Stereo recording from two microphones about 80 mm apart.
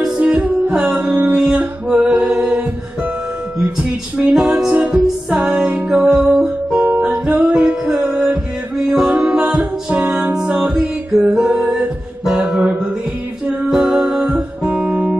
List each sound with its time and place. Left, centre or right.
0.4 s music: centre
4.3 s music: centre
6.9 s music: centre
7.5 s music: centre
11.8 s music: centre
12.5 s music: centre